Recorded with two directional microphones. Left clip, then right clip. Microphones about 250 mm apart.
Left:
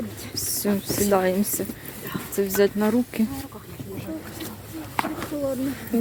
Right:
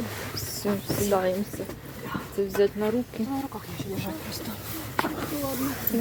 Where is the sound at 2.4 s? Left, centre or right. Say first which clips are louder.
Left 3 dB; left.